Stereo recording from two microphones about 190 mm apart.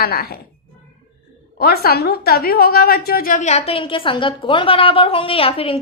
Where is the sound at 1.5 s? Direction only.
55° left (ahead or behind).